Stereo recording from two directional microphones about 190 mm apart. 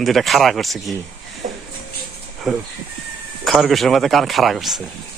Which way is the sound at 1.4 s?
40° right (ahead or behind).